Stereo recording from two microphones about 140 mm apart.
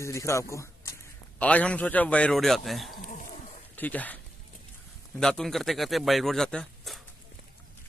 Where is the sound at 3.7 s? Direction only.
10° left (ahead or behind).